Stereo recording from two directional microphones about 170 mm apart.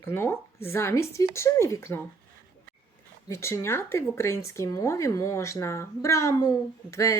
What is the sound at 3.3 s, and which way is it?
A woman's voice, 15° left (ahead or behind).